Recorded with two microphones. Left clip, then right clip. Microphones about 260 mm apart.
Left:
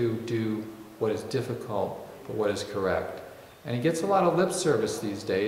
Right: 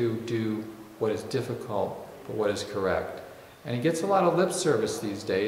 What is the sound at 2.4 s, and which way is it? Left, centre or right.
A man's voice, centre.